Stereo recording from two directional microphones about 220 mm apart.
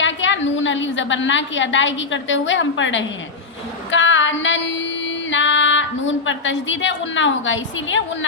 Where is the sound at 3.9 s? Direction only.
60° left (ahead or behind).